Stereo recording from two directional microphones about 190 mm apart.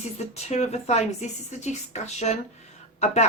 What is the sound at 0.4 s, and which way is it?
Speech, 35° left (ahead or behind).